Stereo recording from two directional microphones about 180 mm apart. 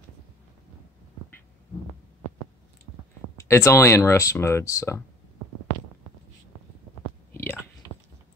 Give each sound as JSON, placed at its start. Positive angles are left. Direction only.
{"t": 3.3, "sound": "speech", "side_deg": 15}